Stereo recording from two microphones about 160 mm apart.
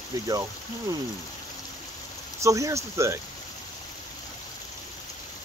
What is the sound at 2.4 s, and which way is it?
Speech, 20° right (ahead or behind).